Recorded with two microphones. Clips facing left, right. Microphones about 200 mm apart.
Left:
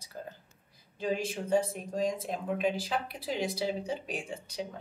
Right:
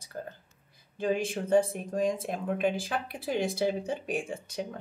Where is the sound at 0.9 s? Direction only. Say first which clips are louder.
Right 3 dB; 55° right (ahead or behind).